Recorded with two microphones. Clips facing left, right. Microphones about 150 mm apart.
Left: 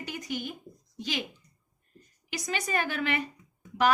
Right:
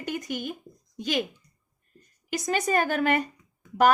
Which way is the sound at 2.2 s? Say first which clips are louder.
Right 7 dB; 45° right (ahead or behind).